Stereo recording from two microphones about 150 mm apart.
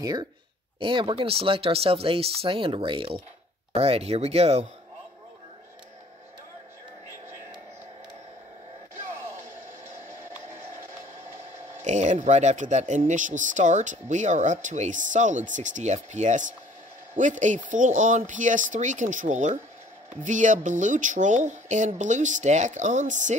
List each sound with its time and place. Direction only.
0.0 s speech: 25° right (ahead or behind); by 4.6 s 45° right (ahead or behind)
11.8 s speech: 55° right (ahead or behind)